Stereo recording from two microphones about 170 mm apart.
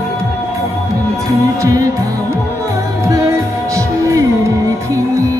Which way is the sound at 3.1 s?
20° right (ahead or behind).